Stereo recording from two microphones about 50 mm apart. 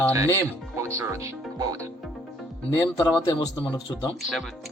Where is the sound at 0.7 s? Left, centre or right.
Right.